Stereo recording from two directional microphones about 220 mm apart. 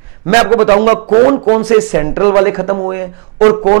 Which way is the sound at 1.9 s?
15° right (ahead or behind).